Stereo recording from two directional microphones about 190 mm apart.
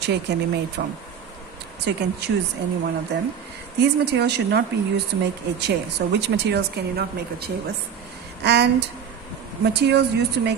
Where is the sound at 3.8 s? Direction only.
65° right (ahead or behind).